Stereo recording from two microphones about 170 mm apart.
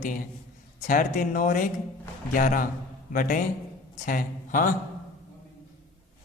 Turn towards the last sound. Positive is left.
turn(degrees=55)  # may be behind; listen again after turning